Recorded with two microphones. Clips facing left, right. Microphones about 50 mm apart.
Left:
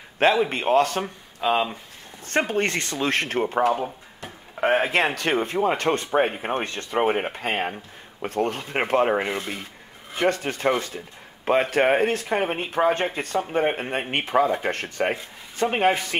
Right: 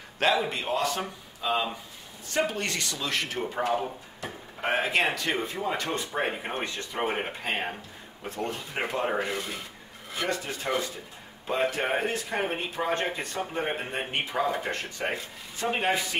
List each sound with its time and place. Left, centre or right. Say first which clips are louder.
0.2 s a man's voice: left 6 dB; left
0.5 s speech: left 8 dB; left
7.0 s speech: left 7 dB; left
7.2 s speech: left 5 dB; left